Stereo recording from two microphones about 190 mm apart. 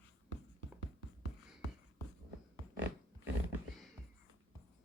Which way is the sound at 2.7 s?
70° right (ahead or behind).